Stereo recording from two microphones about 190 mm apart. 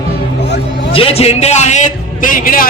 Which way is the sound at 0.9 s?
30° left (ahead or behind).